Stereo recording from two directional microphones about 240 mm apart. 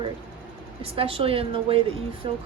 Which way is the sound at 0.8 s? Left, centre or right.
Right.